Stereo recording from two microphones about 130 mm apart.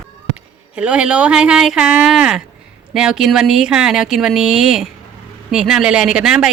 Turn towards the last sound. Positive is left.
turn(degrees=-5)  # may be behind; listen again after turning